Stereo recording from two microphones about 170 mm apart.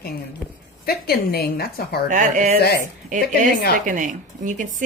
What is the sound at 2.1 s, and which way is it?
Speech, 45° right (ahead or behind).